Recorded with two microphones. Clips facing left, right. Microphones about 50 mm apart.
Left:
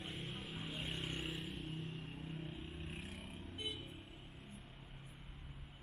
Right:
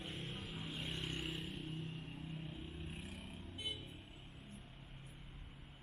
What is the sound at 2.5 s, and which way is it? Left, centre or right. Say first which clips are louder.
Vehicle: left 1 dB; left.